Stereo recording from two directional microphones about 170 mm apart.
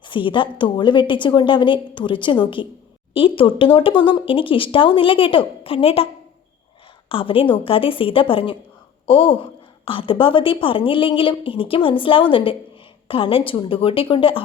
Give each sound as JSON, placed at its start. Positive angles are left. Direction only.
{"t": 0.0, "sound": "a woman's voice", "side_deg": 30}
{"t": 7.1, "sound": "a woman's voice", "side_deg": 30}